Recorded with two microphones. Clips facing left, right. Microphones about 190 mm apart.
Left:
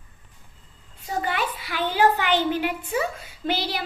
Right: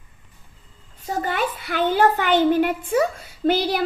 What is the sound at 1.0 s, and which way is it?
A child's voice, 45° right (ahead or behind).